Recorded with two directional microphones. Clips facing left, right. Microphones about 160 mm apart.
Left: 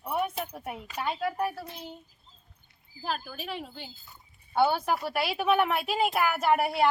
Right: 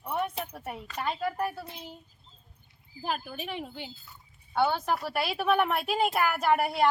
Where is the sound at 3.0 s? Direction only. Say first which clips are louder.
Right 1 dB; 15° right (ahead or behind).